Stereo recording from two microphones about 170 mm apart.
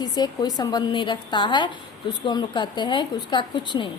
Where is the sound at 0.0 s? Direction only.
25° left (ahead or behind).